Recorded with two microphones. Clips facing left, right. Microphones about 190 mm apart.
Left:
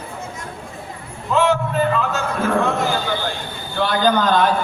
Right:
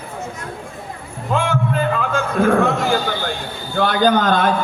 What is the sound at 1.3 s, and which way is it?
Music, 50° right (ahead or behind).